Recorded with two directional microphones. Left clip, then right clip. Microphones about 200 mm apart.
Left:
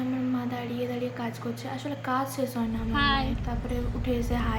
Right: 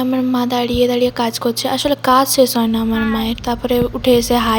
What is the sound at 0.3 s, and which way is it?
A woman's voice, 55° right (ahead or behind).